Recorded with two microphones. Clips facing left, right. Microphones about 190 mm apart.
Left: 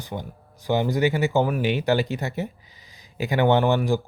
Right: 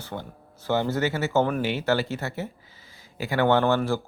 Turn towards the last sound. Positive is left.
turn(degrees=15)  # may be behind; listen again after turning